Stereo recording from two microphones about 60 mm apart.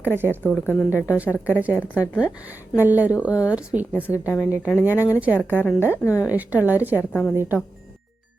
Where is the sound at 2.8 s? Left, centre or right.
Right.